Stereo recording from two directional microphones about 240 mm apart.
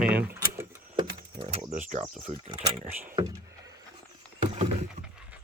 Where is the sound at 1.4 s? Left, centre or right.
Right.